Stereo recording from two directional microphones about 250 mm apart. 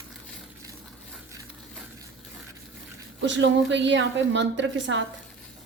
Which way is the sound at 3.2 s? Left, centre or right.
Right.